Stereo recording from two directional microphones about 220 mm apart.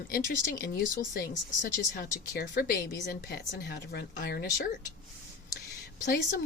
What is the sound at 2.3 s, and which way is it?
Speech, 40° left (ahead or behind).